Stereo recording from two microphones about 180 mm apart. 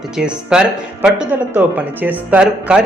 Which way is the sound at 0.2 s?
5° right (ahead or behind).